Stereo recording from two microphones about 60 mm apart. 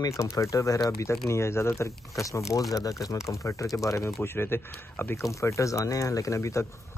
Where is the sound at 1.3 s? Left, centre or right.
Left.